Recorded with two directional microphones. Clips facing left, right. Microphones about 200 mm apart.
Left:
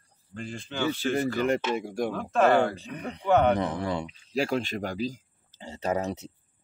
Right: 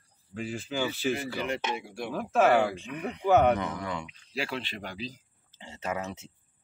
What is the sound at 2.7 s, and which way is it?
Speech, 35° left (ahead or behind).